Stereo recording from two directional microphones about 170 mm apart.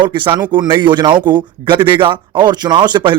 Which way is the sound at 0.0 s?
30° right (ahead or behind).